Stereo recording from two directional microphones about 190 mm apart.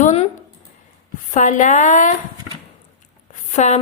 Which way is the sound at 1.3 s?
40° left (ahead or behind).